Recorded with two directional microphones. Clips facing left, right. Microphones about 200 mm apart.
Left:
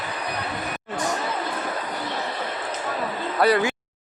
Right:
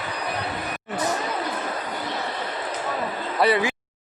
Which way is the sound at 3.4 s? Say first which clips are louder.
Left 1 dB; centre (ahead or behind).